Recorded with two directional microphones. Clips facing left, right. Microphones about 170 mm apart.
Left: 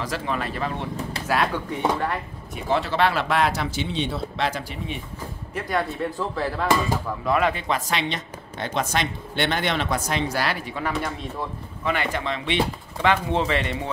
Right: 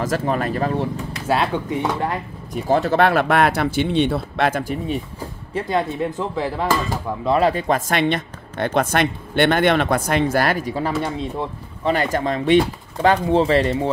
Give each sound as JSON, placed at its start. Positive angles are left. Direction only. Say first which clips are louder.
{"t": 0.0, "sound": "speech", "louder": "right 6 dB", "side_deg": -45}
{"t": 1.2, "sound": "speech", "louder": "right 4 dB", "side_deg": -25}
{"t": 2.5, "sound": "speech", "louder": "right 6 dB", "side_deg": -45}
{"t": 5.5, "sound": "speech", "louder": "right 4 dB", "side_deg": -25}
{"t": 7.2, "sound": "speech", "louder": "right 5 dB", "side_deg": -35}
{"t": 11.0, "sound": "speech", "louder": "right 5 dB", "side_deg": -30}
{"t": 11.9, "sound": "speech", "louder": "right 6 dB", "side_deg": -40}